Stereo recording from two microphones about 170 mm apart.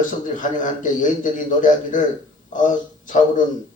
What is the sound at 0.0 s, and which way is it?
A man's voice, 50° left (ahead or behind).